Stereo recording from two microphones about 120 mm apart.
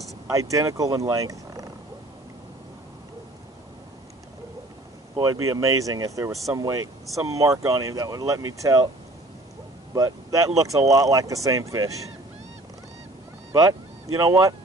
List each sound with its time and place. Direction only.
0.3 s speech: 25° right (ahead or behind)
5.1 s speech: 35° right (ahead or behind)
9.9 s speech: 30° right (ahead or behind)
13.5 s speech: 30° right (ahead or behind)